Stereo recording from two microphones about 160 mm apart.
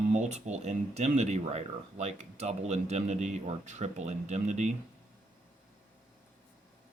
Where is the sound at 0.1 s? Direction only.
45° right (ahead or behind).